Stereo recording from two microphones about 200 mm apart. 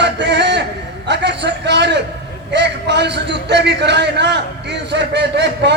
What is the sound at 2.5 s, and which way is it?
A man's voice, 60° right (ahead or behind).